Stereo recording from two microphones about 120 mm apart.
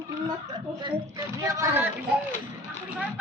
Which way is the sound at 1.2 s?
25° right (ahead or behind).